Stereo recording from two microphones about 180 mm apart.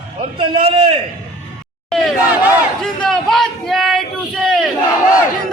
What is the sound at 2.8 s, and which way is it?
Speech, 5° left (ahead or behind).